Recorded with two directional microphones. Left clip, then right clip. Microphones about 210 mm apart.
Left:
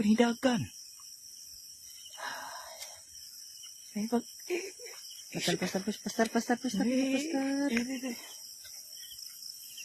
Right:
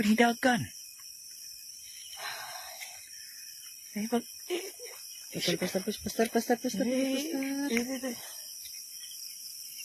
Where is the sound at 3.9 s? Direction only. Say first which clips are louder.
Right 1 dB; 20° left (ahead or behind).